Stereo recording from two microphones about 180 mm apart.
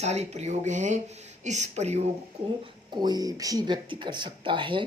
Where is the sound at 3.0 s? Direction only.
20° right (ahead or behind).